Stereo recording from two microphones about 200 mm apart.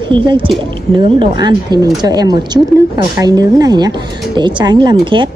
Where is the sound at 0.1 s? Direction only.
25° right (ahead or behind).